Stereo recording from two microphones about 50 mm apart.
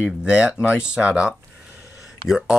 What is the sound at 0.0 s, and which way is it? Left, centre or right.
Speech, right.